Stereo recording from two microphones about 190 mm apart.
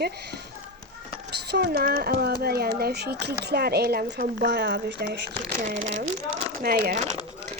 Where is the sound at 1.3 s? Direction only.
60° right (ahead or behind).